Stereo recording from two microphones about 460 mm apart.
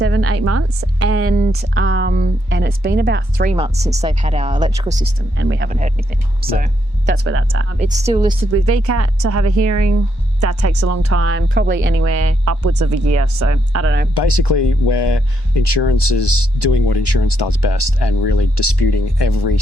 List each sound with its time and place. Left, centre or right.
0.0 s a woman's voice: right
7.8 s speech: centre
8.4 s speech: right
14.1 s speech: left